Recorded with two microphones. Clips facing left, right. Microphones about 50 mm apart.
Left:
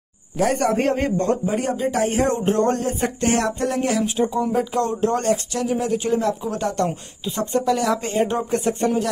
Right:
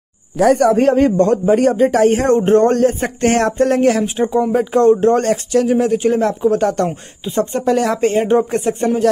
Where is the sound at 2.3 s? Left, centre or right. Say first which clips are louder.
Right 8 dB; right.